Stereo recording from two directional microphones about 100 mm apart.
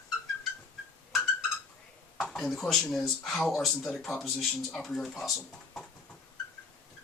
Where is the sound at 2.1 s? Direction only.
5° left (ahead or behind).